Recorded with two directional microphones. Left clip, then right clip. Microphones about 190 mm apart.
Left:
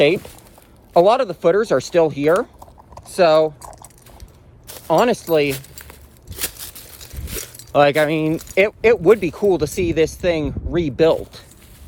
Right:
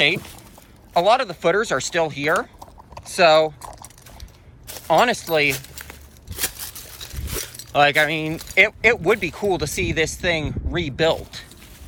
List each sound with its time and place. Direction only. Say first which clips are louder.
0.2 s speech: left 1 dB; centre (ahead or behind)
0.9 s speech: left 3 dB; 25° left (ahead or behind)
3.6 s typing: even; 15° right (ahead or behind)
4.9 s speech: left 2 dB; 25° left (ahead or behind)
5.5 s a sound: right 2 dB; centre (ahead or behind)
7.7 s speech: left 2 dB; 30° left (ahead or behind)